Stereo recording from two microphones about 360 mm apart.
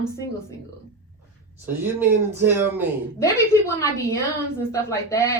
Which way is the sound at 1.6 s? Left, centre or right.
Centre.